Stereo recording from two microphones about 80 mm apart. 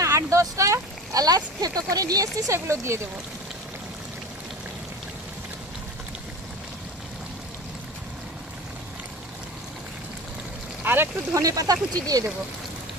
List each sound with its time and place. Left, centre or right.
0.0 s speech: right
10.8 s a sound: right
11.3 s speech: right